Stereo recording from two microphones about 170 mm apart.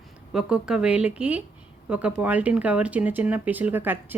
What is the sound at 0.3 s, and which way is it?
Speech, 5° right (ahead or behind).